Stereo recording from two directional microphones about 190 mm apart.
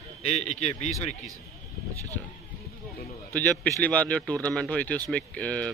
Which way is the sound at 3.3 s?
10° left (ahead or behind).